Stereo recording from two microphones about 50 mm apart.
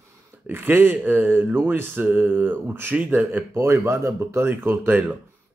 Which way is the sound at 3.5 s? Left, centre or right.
Right.